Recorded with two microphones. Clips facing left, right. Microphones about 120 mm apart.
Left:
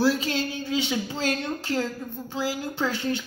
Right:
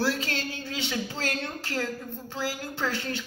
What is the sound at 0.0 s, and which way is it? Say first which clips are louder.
A man's voice: left 5 dB; 15° left (ahead or behind).